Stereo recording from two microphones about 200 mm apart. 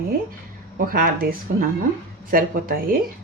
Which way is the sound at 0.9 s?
45° right (ahead or behind).